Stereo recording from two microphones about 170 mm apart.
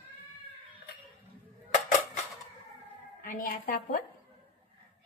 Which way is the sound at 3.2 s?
50° left (ahead or behind).